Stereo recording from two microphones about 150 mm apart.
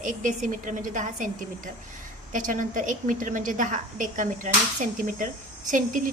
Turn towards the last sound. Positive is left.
turn(degrees=-60)  # may be behind; listen again after turning